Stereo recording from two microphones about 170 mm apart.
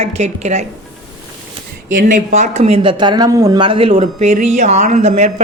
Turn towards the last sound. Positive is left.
turn(degrees=-40)  # may be behind; listen again after turning